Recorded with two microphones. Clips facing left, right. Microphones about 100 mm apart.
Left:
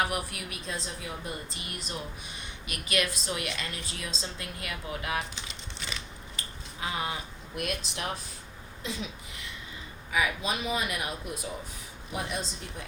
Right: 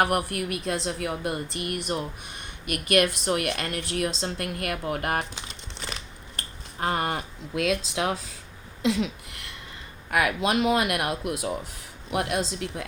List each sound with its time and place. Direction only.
0.0 s speech: 60° right (ahead or behind)
5.9 s a sound: 55° right (ahead or behind); by 8.1 s 90° right
8.8 s speech: 80° right